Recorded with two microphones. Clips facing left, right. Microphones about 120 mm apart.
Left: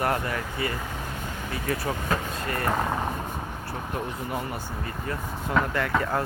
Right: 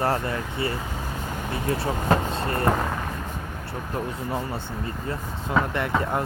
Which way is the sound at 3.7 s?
25° right (ahead or behind).